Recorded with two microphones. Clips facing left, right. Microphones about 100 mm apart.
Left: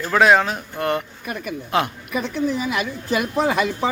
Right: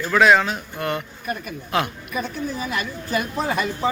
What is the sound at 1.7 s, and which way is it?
Mantra, 25° left (ahead or behind).